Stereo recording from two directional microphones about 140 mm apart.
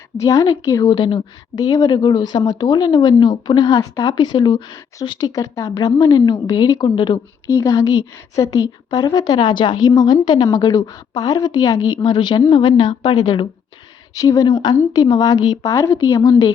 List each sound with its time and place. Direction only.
0.2 s a woman's voice: 25° left (ahead or behind); by 13.1 s 45° left (ahead or behind)
13.1 s a woman's voice: 35° left (ahead or behind)